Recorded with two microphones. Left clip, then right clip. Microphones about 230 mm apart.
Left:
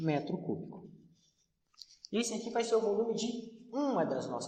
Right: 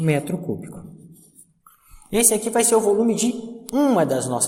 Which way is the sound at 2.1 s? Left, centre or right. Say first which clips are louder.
Right 14 dB; right.